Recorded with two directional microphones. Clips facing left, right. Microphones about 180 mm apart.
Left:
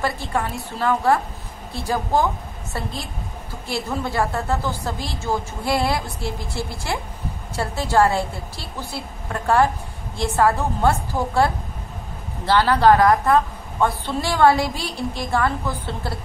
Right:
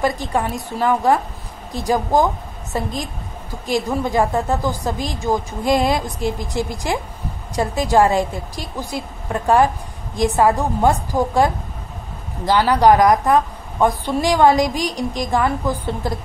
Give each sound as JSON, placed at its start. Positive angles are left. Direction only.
{"t": 0.0, "sound": "a woman's voice", "side_deg": -15}